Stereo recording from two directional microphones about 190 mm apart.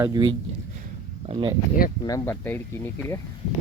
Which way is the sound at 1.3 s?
25° right (ahead or behind).